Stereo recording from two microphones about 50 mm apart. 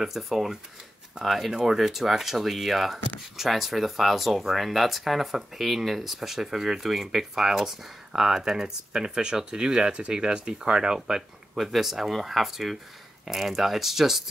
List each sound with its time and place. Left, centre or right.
0.0 s speech: centre
11.5 s speech: centre